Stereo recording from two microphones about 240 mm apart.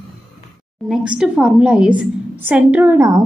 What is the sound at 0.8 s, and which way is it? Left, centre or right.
A woman's voice, centre.